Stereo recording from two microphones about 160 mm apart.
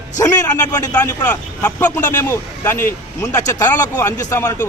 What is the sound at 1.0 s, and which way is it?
Speech, 10° left (ahead or behind).